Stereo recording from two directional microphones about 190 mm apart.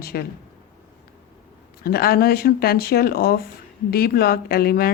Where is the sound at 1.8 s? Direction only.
55° left (ahead or behind).